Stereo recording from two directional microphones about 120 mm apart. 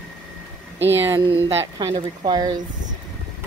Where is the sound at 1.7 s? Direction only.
35° right (ahead or behind).